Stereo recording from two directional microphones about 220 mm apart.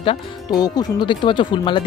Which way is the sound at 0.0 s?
20° left (ahead or behind).